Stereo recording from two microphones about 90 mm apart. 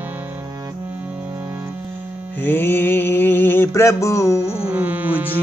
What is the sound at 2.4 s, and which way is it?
Mantra, 25° left (ahead or behind).